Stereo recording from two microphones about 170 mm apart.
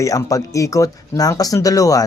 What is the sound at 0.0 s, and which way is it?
Speech, 20° left (ahead or behind).